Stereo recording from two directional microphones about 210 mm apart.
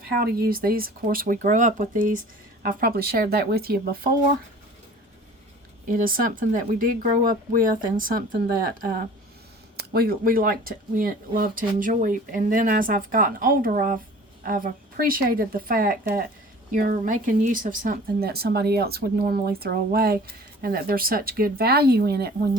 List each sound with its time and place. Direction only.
0.2 s speech: 45° right (ahead or behind)
5.9 s speech: 40° right (ahead or behind)
9.7 s speech: 45° right (ahead or behind)